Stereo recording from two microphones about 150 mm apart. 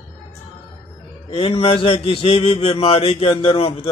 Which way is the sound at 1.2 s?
35° left (ahead or behind).